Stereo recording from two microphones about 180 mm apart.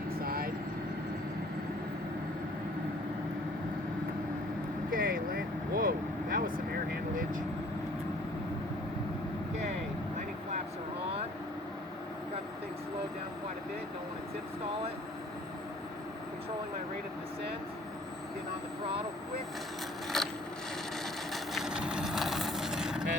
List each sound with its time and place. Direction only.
0.2 s vehicle: 55° right (ahead or behind)
4.9 s vehicle: 55° right (ahead or behind)
20.1 s a sound: centre (ahead or behind)
21.3 s vehicle: centre (ahead or behind)